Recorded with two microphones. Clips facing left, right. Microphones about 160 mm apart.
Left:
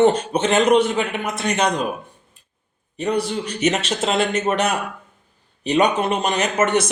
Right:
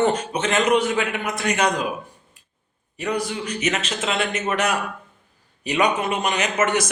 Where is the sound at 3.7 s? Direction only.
40° left (ahead or behind).